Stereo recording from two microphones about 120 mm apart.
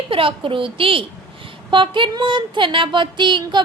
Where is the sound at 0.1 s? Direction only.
45° right (ahead or behind).